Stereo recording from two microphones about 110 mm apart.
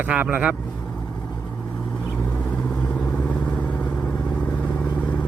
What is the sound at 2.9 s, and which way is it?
Vehicle, 10° left (ahead or behind).